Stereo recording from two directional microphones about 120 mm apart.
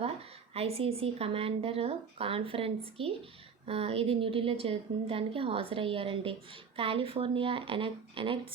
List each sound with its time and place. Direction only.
0.0 s a woman's voice: 55° right (ahead or behind)